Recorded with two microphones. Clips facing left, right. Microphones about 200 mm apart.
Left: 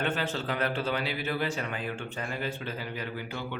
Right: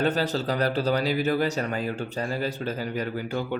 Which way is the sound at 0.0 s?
40° right (ahead or behind).